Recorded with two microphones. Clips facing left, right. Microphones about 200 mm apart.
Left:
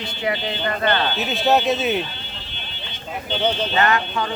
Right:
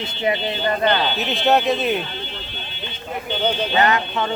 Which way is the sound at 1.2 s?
Centre (ahead or behind).